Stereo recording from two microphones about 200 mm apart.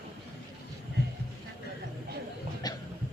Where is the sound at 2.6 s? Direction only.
20° left (ahead or behind).